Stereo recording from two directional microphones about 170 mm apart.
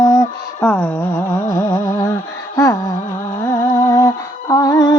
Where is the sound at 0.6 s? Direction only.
10° left (ahead or behind).